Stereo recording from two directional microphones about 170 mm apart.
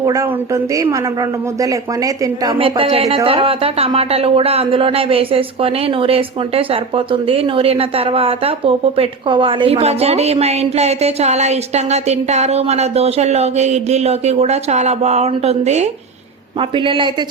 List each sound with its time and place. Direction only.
0.0 s a woman's voice: 20° right (ahead or behind); by 15.9 s 40° right (ahead or behind)
16.6 s a woman's voice: 30° right (ahead or behind)